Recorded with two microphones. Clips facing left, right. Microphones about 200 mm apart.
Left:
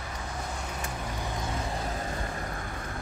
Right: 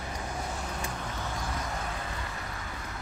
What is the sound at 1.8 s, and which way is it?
Vehicle, 35° left (ahead or behind).